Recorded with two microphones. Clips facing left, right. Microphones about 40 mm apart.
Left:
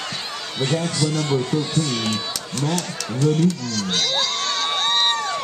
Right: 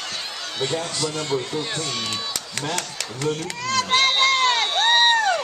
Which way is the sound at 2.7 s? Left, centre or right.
Right.